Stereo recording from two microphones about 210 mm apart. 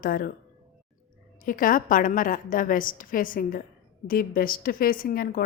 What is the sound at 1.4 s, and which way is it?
A woman's voice, 40° left (ahead or behind).